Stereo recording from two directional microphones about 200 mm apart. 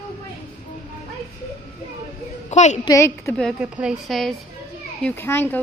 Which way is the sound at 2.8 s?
15° left (ahead or behind).